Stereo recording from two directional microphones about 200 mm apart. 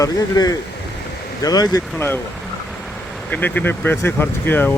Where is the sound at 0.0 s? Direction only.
20° left (ahead or behind).